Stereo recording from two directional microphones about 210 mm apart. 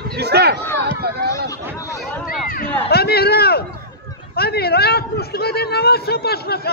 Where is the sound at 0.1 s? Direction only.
50° right (ahead or behind).